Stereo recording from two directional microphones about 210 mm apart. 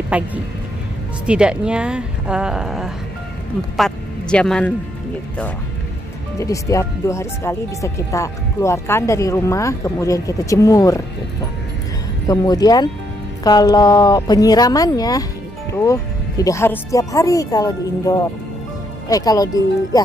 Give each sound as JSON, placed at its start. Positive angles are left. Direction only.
{"t": 0.1, "sound": "a woman's voice", "side_deg": -5}
{"t": 6.4, "sound": "speech", "side_deg": 15}
{"t": 12.3, "sound": "speech", "side_deg": 20}